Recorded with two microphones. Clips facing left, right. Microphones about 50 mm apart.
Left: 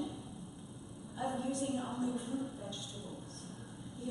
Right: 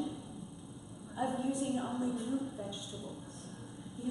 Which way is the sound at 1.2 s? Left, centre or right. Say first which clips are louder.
Right 2 dB; centre.